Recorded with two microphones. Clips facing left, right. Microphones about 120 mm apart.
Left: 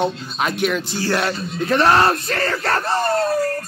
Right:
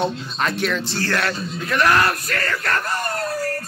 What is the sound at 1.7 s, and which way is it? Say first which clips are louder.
Speech: left 3 dB; 30° left (ahead or behind).